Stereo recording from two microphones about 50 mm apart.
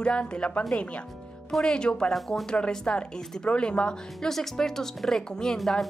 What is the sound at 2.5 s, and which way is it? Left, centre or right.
Speech, centre.